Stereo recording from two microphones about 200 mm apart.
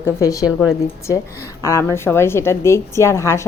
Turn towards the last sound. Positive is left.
turn(degrees=15)  # may be behind; listen again after turning